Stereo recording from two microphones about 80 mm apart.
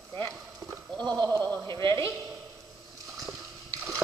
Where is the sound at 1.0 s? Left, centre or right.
Centre.